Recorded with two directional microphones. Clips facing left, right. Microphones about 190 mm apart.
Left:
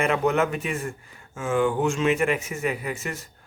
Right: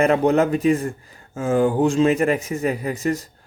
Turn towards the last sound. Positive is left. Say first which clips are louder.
# right 8 dB
turn(degrees=-35)  # may be behind; listen again after turning